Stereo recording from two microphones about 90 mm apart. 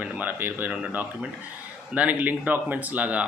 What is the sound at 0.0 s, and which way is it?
Speech, 20° right (ahead or behind).